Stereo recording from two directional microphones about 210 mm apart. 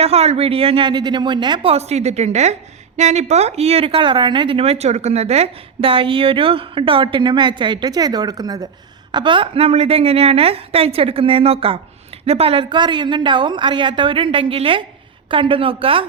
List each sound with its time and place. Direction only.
0.0 s a woman's voice: 30° right (ahead or behind)